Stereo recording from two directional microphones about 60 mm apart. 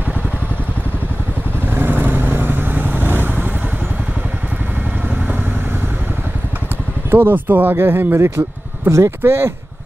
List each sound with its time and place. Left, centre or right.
1.7 s vehicle: right
7.1 s speech: right